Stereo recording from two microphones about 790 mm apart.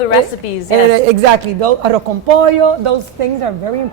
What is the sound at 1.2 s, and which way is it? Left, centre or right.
Speech, right.